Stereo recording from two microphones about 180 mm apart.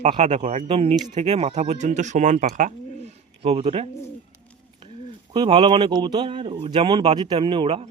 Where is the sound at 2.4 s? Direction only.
45° right (ahead or behind).